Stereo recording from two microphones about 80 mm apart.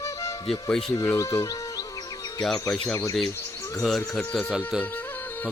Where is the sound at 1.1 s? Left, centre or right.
Left.